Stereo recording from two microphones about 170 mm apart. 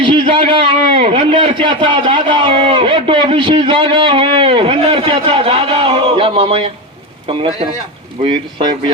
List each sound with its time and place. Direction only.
0.0 s a man's voice: 30° right (ahead or behind)